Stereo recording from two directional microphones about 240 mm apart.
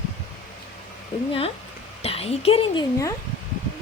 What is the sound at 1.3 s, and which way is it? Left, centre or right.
A woman's voice, left.